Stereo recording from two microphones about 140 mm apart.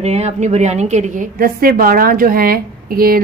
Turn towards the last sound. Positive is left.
turn(degrees=-90)